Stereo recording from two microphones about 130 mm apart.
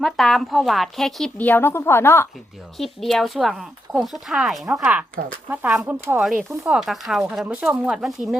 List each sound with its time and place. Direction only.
0.0 s speech: centre (ahead or behind)
1.4 s a woman's voice: 15° left (ahead or behind)
2.7 s speech: centre (ahead or behind)